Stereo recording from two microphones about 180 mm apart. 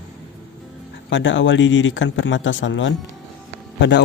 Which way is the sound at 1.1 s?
90° left.